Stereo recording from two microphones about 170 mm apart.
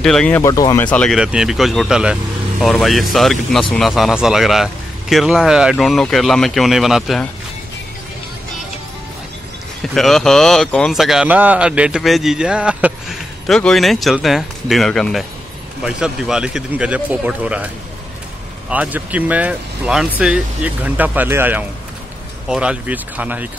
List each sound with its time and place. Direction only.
0.0 s speech: 5° left (ahead or behind)
0.5 s speech: 20° left (ahead or behind)
0.8 s speech: 5° left (ahead or behind)
9.9 s speech: centre (ahead or behind)
18.7 s speech: 10° right (ahead or behind)